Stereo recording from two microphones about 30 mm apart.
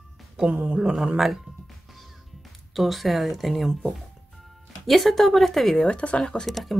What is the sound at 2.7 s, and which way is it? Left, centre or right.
Speech, centre.